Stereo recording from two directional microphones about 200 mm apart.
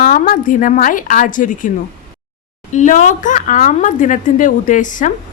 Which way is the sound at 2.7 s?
40° left (ahead or behind).